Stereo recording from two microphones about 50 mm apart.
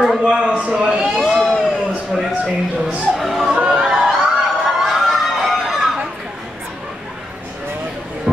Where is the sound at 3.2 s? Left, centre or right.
Centre.